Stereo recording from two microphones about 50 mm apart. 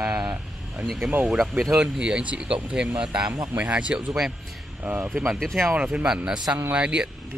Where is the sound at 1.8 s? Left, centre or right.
Centre.